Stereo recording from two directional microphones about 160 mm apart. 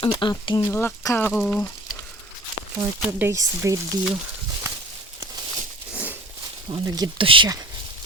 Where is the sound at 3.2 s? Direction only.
20° right (ahead or behind).